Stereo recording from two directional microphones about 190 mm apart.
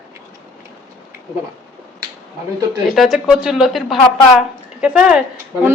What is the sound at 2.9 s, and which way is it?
A woman's voice, centre (ahead or behind).